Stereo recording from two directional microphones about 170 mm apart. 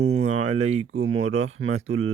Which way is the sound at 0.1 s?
40° right (ahead or behind).